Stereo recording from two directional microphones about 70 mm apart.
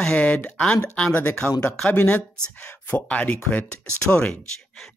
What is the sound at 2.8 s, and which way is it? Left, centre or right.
Speech, left.